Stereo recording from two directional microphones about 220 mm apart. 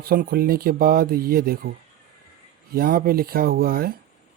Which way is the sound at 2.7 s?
40° right (ahead or behind).